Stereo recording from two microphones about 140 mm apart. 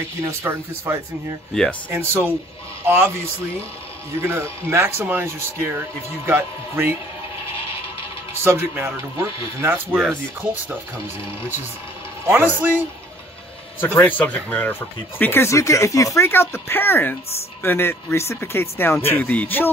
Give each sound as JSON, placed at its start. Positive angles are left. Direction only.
{"t": 0.2, "sound": "speech", "side_deg": -20}
{"t": 1.5, "sound": "speech", "side_deg": 5}
{"t": 1.9, "sound": "speech", "side_deg": -15}
{"t": 4.2, "sound": "speech", "side_deg": -20}
{"t": 8.5, "sound": "speech", "side_deg": -15}
{"t": 12.3, "sound": "speech", "side_deg": -15}
{"t": 13.7, "sound": "speech", "side_deg": 15}